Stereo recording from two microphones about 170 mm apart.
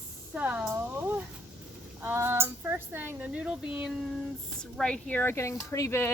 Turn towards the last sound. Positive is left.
turn(degrees=15)  # may be behind; listen again after turning